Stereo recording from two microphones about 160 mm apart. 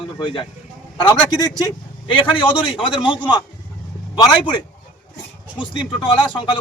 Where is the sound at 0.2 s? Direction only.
30° left (ahead or behind).